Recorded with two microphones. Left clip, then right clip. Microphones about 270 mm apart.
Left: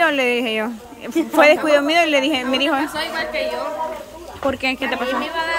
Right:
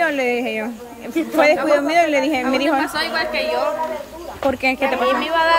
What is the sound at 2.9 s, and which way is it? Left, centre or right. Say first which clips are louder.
Speech: right 2 dB; centre.